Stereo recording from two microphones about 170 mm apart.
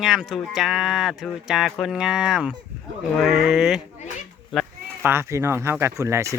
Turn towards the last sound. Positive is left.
turn(degrees=-15)  # may be behind; listen again after turning